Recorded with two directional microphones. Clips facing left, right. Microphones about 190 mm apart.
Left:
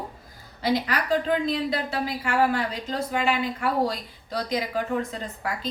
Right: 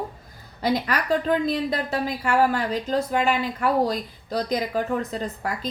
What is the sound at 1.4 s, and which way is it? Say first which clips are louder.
A woman's voice: right 2 dB; 45° right (ahead or behind).